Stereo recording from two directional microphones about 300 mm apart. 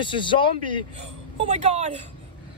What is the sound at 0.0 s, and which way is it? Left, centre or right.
Speech, centre.